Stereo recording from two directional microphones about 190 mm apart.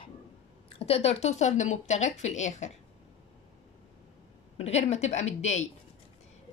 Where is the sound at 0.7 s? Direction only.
30° left (ahead or behind).